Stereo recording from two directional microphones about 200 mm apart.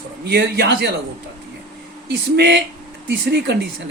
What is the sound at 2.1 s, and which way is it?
Speech, 55° right (ahead or behind).